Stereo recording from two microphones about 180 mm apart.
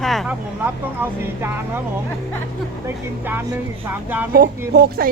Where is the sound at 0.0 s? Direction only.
Centre (ahead or behind).